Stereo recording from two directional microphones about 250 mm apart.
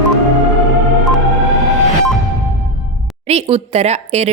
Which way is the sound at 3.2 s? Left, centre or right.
Right.